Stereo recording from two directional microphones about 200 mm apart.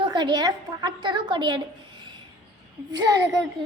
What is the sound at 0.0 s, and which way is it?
A woman's voice, 20° right (ahead or behind).